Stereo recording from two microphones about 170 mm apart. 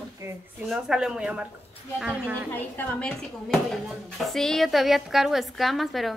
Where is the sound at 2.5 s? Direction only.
5° left (ahead or behind).